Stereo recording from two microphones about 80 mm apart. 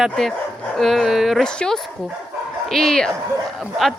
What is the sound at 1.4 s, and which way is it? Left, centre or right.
A woman's voice, centre.